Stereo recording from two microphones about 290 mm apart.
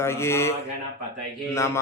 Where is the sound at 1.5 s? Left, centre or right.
Centre.